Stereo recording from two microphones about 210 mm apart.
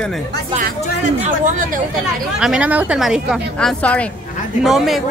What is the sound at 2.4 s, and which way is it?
A woman's voice, 5° right (ahead or behind).